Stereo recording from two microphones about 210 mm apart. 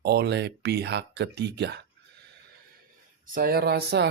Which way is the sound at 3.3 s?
45° right (ahead or behind).